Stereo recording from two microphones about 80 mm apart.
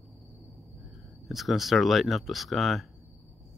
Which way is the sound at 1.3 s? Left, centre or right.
Centre.